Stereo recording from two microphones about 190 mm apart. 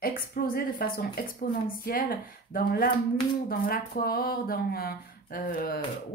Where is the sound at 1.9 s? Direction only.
50° left (ahead or behind).